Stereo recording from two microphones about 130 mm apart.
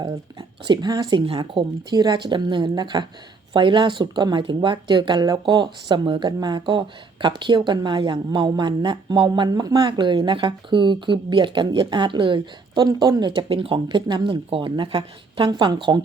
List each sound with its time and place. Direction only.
0.0 s speech: 35° right (ahead or behind)